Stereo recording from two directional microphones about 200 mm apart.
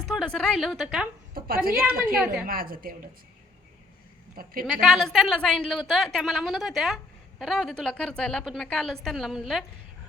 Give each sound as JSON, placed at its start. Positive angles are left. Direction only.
{"t": 0.1, "sound": "a woman's voice", "side_deg": 0}
{"t": 1.3, "sound": "a woman's voice", "side_deg": -50}
{"t": 2.1, "sound": "a woman's voice", "side_deg": -5}
{"t": 2.5, "sound": "a woman's voice", "side_deg": -45}
{"t": 4.6, "sound": "a woman's voice", "side_deg": 0}